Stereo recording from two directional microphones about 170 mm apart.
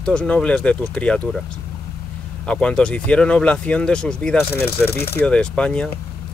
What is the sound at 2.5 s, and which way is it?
Speech, 5° left (ahead or behind).